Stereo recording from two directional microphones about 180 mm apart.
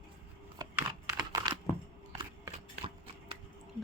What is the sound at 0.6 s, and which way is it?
Computer keyboard, 20° right (ahead or behind).